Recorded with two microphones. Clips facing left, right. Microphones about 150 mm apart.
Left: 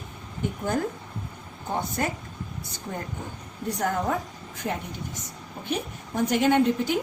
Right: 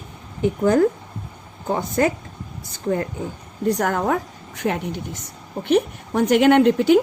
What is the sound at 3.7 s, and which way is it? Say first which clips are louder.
A woman's voice: right 1 dB; 80° right.